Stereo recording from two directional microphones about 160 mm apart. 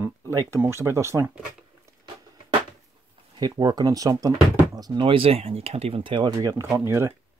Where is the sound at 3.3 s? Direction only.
25° right (ahead or behind).